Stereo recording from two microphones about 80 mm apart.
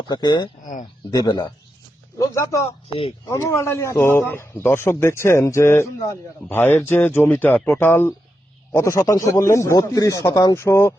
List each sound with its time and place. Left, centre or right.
0.1 s speech: left
2.1 s a man's voice: left
8.7 s a man's voice: left
10.6 s a man's voice: left